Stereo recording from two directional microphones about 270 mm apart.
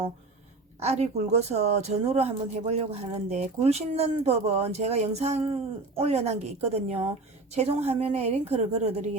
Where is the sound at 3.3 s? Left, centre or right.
Right.